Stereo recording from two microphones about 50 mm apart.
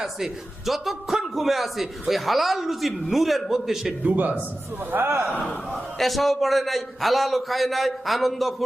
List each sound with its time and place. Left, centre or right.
0.0 s a man's voice: centre
4.0 s a man's voice: right
5.4 s a man's voice: centre